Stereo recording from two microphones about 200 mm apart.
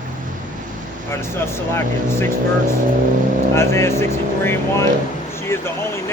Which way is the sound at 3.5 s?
15° left (ahead or behind).